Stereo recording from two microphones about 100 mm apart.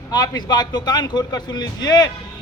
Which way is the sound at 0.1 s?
40° left (ahead or behind).